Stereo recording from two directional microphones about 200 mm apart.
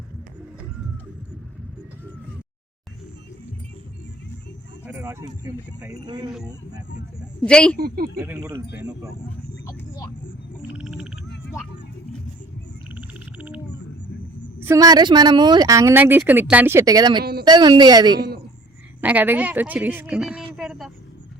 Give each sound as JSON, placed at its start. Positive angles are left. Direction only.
{"t": 4.9, "sound": "a sound", "side_deg": -5}
{"t": 5.2, "sound": "speech", "side_deg": -15}
{"t": 7.4, "sound": "a woman's voice", "side_deg": 5}
{"t": 7.8, "sound": "speech", "side_deg": -50}
{"t": 8.2, "sound": "speech", "side_deg": -15}
{"t": 9.6, "sound": "vehicle", "side_deg": 15}
{"t": 10.8, "sound": "frog", "side_deg": -5}
{"t": 12.9, "sound": "frog", "side_deg": -10}
{"t": 14.6, "sound": "a woman's voice", "side_deg": -15}
{"t": 19.0, "sound": "speech", "side_deg": -10}
{"t": 20.6, "sound": "a sound", "side_deg": 0}